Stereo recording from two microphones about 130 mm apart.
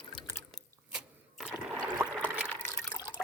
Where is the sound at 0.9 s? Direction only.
5° right (ahead or behind).